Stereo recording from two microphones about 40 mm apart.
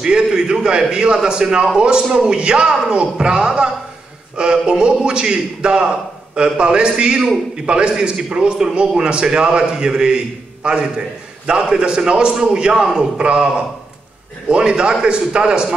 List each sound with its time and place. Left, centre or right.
0.0 s a man's voice: centre
13.2 s a man's voice: right
14.5 s a man's voice: right